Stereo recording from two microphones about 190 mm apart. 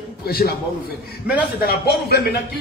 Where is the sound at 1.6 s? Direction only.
60° left (ahead or behind).